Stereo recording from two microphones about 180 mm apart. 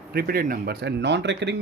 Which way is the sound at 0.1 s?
60° right (ahead or behind).